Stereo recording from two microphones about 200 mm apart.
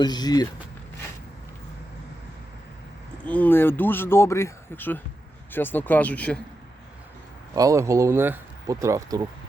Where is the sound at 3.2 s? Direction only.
10° left (ahead or behind).